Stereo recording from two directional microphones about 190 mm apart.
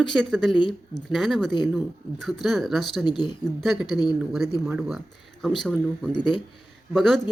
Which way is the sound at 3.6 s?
Centre (ahead or behind).